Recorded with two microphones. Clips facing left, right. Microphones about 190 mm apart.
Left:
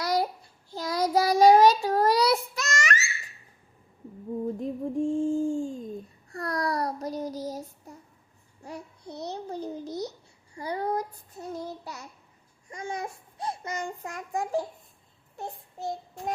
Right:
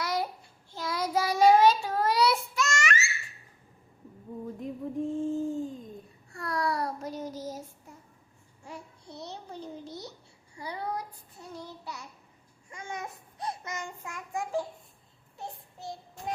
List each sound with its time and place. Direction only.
0.0 s child singing: 35° left (ahead or behind)
4.6 s music: 30° left (ahead or behind)
6.3 s a sound: 40° left (ahead or behind)
7.9 s child singing: 35° left (ahead or behind)
9.2 s a sound: 40° left (ahead or behind)
10.6 s child singing: 45° left (ahead or behind)